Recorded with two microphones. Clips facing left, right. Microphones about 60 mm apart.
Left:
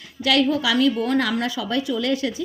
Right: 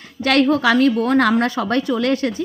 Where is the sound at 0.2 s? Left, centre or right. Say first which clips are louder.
Right 4 dB; right.